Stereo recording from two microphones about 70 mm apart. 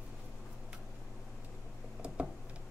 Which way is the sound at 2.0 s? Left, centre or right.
Centre.